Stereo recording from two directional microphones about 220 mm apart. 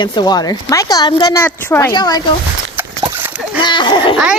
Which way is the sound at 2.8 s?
10° right (ahead or behind).